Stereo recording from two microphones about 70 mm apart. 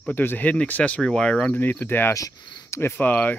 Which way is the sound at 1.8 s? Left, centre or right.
Left.